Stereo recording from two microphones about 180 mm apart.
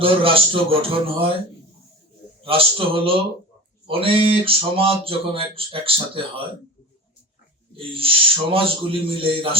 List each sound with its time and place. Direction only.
0.0 s speech: 30° right (ahead or behind)
2.4 s speech: 30° right (ahead or behind)
7.8 s speech: 30° right (ahead or behind)